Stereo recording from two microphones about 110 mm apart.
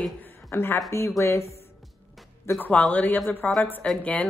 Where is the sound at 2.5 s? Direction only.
15° left (ahead or behind).